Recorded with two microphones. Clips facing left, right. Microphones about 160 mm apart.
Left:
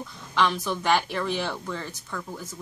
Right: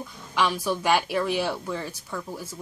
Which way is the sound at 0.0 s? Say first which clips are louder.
Left 1 dB; 10° right (ahead or behind).